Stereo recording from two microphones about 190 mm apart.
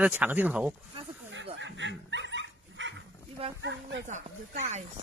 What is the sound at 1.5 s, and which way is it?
Dog, 70° right (ahead or behind).